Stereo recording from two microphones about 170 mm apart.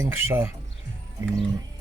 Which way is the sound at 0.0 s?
15° right (ahead or behind).